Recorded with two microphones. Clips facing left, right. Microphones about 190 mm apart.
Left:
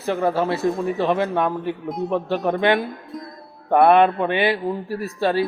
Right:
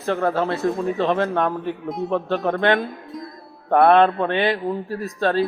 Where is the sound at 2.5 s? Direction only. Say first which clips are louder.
Left 1 dB; 15° left (ahead or behind).